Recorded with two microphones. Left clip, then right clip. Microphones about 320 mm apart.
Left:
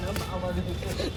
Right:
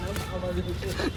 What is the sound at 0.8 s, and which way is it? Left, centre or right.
Speech, centre.